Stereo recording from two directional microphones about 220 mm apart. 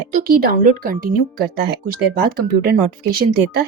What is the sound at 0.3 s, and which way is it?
Speech, 40° right (ahead or behind).